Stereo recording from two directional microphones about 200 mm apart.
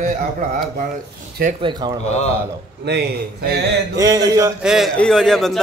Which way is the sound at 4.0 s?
20° right (ahead or behind).